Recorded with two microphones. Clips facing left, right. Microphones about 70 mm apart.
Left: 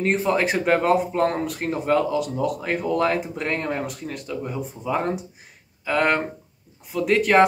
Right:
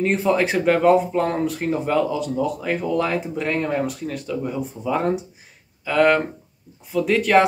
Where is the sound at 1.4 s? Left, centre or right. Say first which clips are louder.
Right 4 dB; centre.